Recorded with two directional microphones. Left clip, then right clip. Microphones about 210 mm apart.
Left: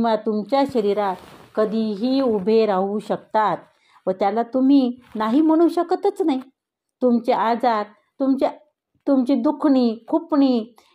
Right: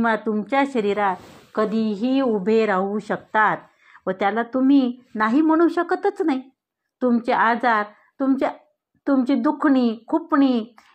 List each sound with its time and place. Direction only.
0.0 s a woman's voice: 10° right (ahead or behind)
2.4 s a woman's voice: 10° right (ahead or behind)